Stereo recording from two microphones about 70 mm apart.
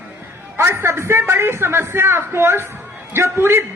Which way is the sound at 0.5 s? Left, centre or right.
Right.